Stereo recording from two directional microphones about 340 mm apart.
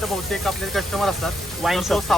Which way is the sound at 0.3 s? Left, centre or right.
Centre.